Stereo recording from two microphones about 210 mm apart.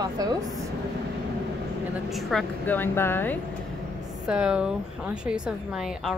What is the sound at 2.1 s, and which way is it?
Speech, centre (ahead or behind).